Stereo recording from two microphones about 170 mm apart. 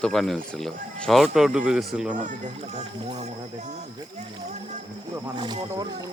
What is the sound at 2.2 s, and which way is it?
Speech, 50° right (ahead or behind).